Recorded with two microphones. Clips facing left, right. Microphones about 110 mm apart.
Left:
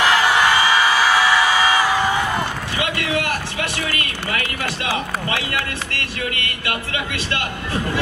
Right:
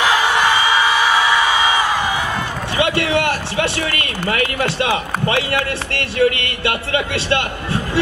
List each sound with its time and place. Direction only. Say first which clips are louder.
2.8 s a man's voice: right 6 dB; 30° right (ahead or behind)